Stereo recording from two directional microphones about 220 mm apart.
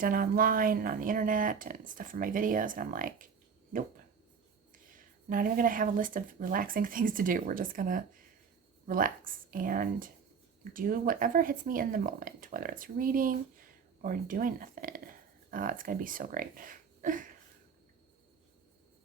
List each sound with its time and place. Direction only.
0.0 s speech: 40° right (ahead or behind)
5.3 s speech: 40° right (ahead or behind)